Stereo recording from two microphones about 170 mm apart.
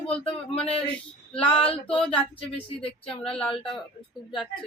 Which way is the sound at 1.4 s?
35° left (ahead or behind).